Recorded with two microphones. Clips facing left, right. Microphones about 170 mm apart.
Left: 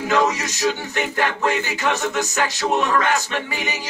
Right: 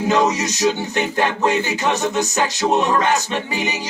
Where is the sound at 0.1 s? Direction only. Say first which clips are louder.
Right 1 dB; 20° right (ahead or behind).